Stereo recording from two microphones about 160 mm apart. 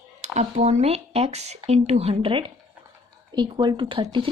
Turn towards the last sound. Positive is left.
turn(degrees=-30)  # may be behind; listen again after turning